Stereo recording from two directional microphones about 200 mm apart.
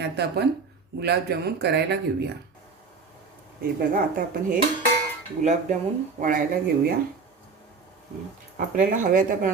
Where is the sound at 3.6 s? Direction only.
45° right (ahead or behind).